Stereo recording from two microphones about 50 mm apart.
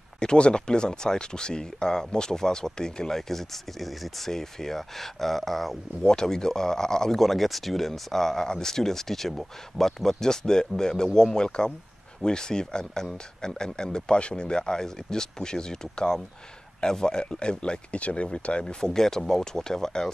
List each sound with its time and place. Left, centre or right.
0.2 s speech: centre